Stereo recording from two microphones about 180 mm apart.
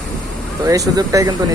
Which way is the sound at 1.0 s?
20° right (ahead or behind).